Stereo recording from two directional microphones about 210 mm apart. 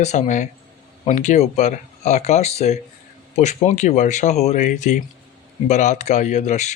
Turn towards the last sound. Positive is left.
turn(degrees=35)  # may be behind; listen again after turning